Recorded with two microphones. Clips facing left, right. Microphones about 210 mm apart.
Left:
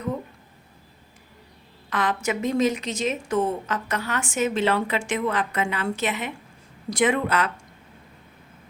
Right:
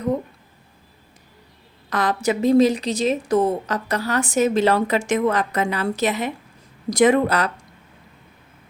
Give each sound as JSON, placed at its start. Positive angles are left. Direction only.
{"t": 1.9, "sound": "a woman's voice", "side_deg": -40}